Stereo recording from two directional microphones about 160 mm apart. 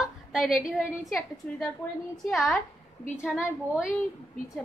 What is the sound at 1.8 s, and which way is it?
Speech, 15° left (ahead or behind).